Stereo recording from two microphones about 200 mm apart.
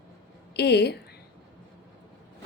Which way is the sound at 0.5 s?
55° left (ahead or behind).